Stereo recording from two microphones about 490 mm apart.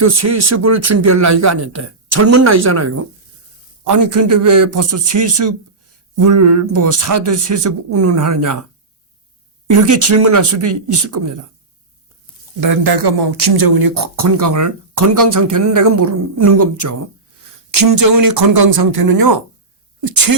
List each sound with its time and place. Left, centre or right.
0.0 s speech: right
3.9 s speech: right
9.6 s speech: right
12.6 s speech: right